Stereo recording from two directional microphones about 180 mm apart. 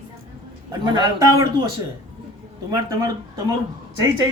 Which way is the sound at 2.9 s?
20° right (ahead or behind).